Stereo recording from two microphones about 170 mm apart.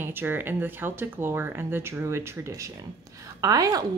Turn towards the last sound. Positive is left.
turn(degrees=-20)  # may be behind; listen again after turning